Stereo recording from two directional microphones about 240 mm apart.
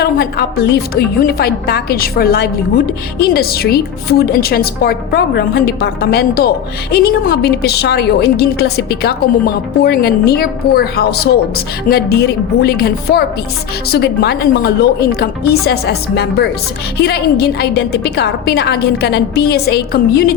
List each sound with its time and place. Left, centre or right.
0.0 s a woman's voice: left